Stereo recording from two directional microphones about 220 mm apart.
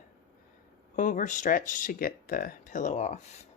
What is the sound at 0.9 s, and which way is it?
Speech, 35° left (ahead or behind).